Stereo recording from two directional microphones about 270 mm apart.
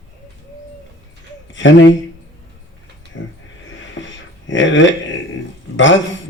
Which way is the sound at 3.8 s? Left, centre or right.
Left.